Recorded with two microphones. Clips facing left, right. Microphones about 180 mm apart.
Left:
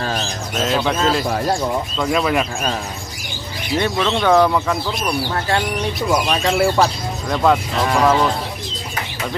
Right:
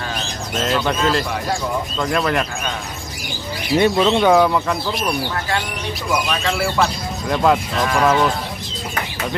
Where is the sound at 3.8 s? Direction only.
15° right (ahead or behind).